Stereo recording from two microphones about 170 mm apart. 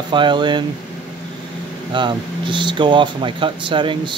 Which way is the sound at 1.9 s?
30° right (ahead or behind).